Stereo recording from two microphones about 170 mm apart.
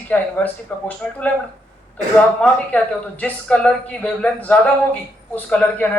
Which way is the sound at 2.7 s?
10° left (ahead or behind).